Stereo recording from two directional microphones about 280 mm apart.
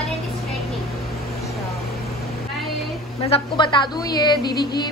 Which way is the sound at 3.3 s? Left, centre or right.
Centre.